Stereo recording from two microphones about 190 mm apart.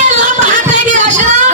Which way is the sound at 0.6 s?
40° right (ahead or behind).